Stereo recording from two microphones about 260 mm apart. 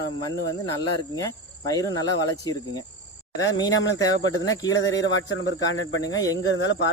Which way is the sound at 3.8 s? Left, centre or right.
Left.